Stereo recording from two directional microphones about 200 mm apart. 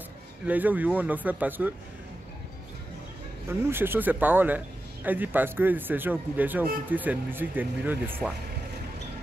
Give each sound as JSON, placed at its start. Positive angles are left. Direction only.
{"t": 0.5, "sound": "speech", "side_deg": -10}
{"t": 3.4, "sound": "speech", "side_deg": -10}